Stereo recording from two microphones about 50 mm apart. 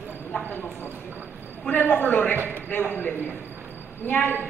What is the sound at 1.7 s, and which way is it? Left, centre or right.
A woman's voice, left.